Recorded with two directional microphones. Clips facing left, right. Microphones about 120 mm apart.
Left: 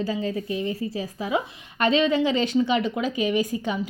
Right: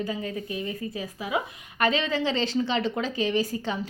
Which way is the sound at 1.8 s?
20° left (ahead or behind).